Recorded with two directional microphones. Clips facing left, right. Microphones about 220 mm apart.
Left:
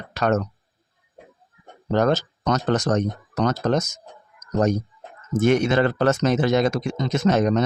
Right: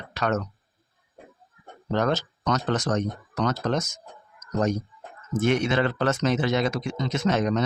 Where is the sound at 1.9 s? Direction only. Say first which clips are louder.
Left 4 dB; 40° left (ahead or behind).